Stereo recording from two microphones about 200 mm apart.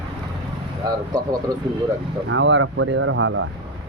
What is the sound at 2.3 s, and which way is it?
Speech, 70° right (ahead or behind).